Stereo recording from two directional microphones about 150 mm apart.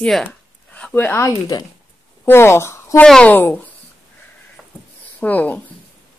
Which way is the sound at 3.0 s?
5° left (ahead or behind).